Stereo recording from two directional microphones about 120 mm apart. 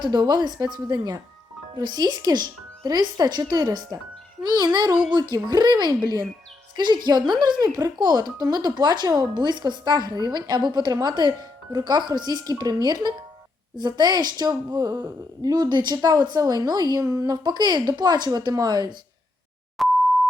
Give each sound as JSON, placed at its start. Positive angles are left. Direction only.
{"t": 0.0, "sound": "speech", "side_deg": -35}
{"t": 19.8, "sound": "beep", "side_deg": 0}